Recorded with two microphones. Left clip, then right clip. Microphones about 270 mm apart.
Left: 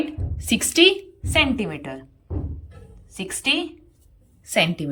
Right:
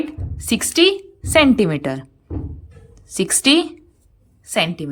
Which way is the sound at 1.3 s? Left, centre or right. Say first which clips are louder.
Right 7 dB; right.